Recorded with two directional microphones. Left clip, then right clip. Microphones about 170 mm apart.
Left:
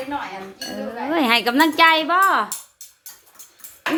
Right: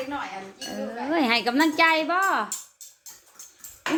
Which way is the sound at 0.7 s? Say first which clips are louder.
Left 3 dB; centre (ahead or behind).